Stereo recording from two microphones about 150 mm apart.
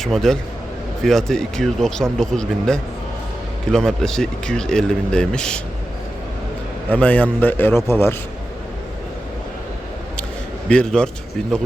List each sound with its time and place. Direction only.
0.0 s speech: centre (ahead or behind)
6.9 s a man's voice: 10° left (ahead or behind)
10.7 s a man's voice: 5° left (ahead or behind)